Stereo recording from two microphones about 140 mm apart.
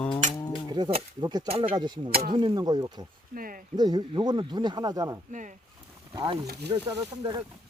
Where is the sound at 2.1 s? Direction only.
90° right.